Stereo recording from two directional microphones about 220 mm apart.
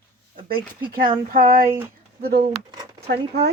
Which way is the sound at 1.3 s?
40° right (ahead or behind).